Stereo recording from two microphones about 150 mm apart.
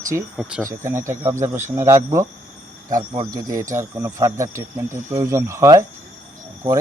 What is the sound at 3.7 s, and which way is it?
Speech, 20° right (ahead or behind).